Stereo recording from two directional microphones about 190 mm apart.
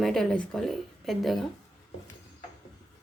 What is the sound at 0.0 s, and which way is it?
A woman's voice, centre (ahead or behind).